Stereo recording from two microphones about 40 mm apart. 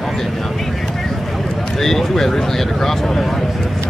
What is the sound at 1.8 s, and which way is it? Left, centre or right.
Speech, centre.